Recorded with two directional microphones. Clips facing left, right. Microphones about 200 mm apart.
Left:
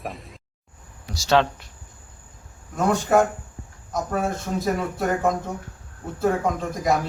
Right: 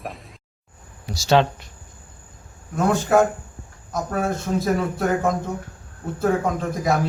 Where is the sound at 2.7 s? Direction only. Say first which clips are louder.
Right 1 dB; centre (ahead or behind).